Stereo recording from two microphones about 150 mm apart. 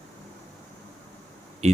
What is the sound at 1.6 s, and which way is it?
Speech, 45° right (ahead or behind).